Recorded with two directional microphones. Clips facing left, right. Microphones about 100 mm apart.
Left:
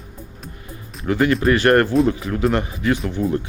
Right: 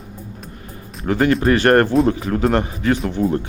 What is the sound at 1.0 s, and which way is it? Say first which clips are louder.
Speech: right 1 dB; 35° right (ahead or behind).